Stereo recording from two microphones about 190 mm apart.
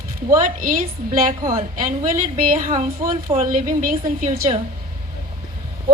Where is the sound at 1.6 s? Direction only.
45° right (ahead or behind).